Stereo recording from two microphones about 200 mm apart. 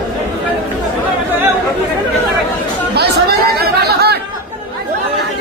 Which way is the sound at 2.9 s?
50° right (ahead or behind).